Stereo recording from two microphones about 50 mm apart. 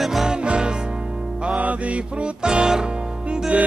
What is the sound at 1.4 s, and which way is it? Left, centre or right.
Music, right.